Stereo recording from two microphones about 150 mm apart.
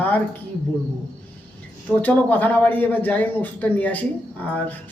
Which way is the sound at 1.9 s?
10° left (ahead or behind).